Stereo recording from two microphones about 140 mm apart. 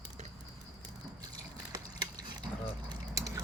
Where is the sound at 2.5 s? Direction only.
15° right (ahead or behind).